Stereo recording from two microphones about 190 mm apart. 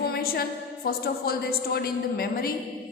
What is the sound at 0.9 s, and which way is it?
A woman's voice, 55° left (ahead or behind).